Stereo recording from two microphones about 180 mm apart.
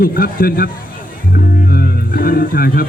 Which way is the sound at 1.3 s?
55° left (ahead or behind).